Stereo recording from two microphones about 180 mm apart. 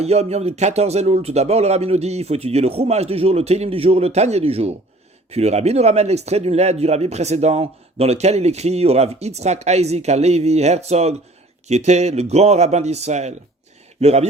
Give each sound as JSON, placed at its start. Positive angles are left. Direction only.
{"t": 0.0, "sound": "speech", "side_deg": -35}